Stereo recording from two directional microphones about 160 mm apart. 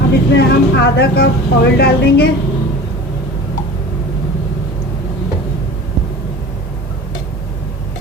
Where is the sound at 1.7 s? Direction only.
90° left.